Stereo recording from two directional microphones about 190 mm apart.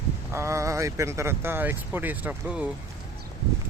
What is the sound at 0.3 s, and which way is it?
Speech, 15° right (ahead or behind).